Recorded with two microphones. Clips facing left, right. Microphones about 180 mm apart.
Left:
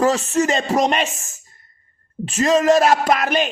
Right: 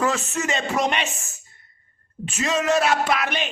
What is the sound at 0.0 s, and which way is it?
A man's voice, 40° left (ahead or behind).